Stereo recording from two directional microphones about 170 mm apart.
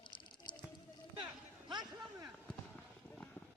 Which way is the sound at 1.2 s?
25° right (ahead or behind).